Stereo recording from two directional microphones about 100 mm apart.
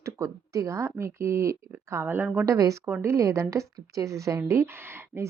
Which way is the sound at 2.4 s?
30° right (ahead or behind).